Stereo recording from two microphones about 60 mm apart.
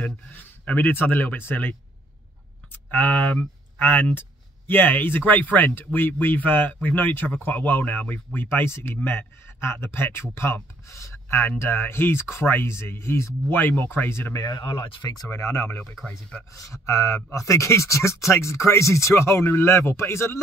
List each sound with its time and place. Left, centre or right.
0.0 s speech: left
8.5 s speech: left
13.6 s speech: left
14.3 s speech: left
15.3 s speech: left
16.5 s speech: left